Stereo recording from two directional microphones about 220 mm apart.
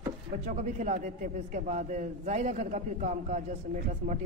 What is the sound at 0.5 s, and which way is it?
A man's voice, 35° right (ahead or behind).